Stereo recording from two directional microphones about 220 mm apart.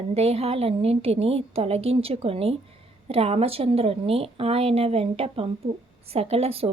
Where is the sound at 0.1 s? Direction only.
25° right (ahead or behind).